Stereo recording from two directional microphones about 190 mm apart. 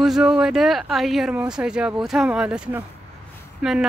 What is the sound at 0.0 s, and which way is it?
Speech, 5° right (ahead or behind).